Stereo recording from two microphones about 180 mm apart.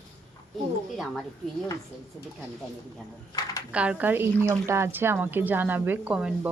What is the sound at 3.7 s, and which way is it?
Speech, 5° right (ahead or behind).